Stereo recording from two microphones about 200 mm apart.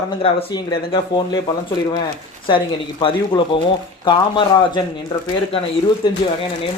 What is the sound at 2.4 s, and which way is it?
Speech, 25° left (ahead or behind).